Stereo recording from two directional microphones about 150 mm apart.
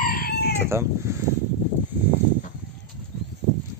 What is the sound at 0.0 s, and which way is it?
Chicken, 80° left.